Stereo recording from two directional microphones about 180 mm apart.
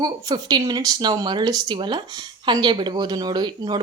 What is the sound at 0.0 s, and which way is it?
Speech, 20° right (ahead or behind).